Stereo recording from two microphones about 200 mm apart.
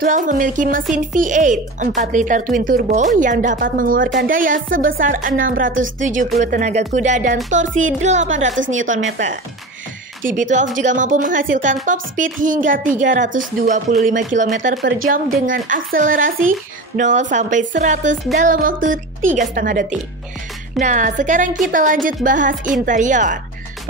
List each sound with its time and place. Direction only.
0.0 s speech: 40° right (ahead or behind)
5.7 s a woman's voice: 75° right (ahead or behind)
6.3 s speech: 35° right (ahead or behind)
8.3 s a woman's voice: 70° right (ahead or behind)
8.7 s speech: 40° right (ahead or behind)